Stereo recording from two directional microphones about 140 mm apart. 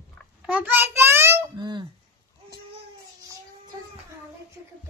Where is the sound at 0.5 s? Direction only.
10° right (ahead or behind).